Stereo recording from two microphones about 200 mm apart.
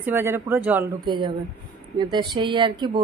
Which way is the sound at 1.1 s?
25° right (ahead or behind).